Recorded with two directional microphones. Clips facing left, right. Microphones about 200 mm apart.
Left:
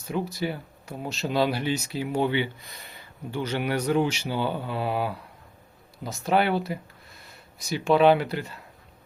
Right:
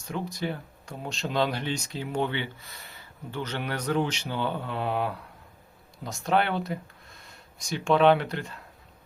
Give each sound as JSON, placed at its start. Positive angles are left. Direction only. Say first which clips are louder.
{"t": 0.1, "sound": "speech", "louder": "left 3 dB", "side_deg": 5}